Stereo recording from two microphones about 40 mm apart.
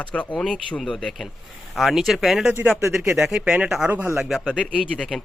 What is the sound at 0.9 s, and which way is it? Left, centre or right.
Speech, centre.